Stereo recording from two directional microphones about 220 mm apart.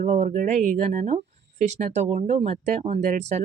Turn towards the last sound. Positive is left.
turn(degrees=-30)  # may be behind; listen again after turning